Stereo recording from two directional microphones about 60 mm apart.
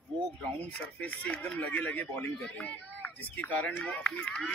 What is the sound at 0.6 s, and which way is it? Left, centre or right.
Speech, left.